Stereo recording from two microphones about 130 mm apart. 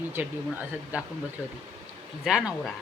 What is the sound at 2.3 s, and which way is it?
Speech, 5° right (ahead or behind).